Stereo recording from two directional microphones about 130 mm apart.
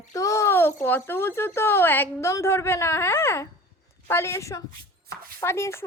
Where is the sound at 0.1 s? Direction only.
25° left (ahead or behind).